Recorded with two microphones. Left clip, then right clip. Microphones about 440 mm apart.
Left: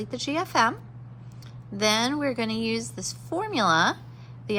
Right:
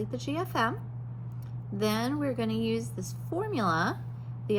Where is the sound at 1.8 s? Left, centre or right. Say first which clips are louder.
Left 6 dB; left.